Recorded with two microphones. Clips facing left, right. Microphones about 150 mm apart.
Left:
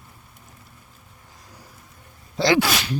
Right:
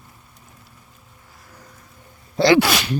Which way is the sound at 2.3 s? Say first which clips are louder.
Right 4 dB; 70° right (ahead or behind).